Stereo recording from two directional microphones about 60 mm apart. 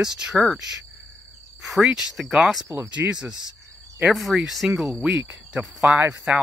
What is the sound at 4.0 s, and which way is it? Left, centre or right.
Speech, centre.